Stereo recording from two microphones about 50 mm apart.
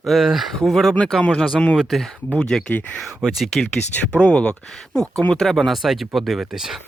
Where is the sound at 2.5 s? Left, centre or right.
Centre.